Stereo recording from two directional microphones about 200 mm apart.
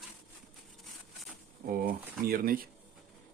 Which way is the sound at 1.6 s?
45° right (ahead or behind).